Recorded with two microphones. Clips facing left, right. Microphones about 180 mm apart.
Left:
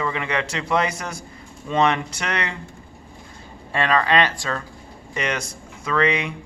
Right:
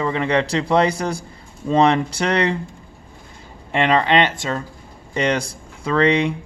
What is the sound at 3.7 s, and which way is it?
A man's voice, 20° right (ahead or behind).